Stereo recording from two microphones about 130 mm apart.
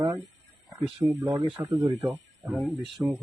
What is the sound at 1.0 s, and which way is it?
Speech, 25° right (ahead or behind).